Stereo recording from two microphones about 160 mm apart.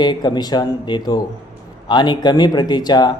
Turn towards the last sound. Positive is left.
turn(degrees=25)  # may be behind; listen again after turning